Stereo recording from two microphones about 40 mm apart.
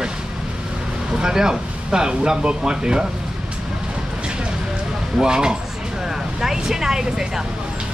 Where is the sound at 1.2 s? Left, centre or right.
Centre.